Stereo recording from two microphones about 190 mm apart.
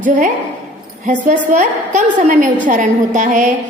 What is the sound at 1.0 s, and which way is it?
A woman's voice, 40° right (ahead or behind).